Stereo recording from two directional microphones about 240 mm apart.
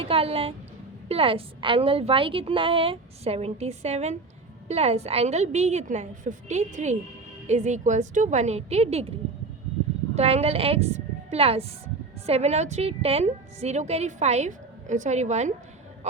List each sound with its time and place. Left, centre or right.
0.0 s a woman's voice: right
10.2 s a woman's voice: right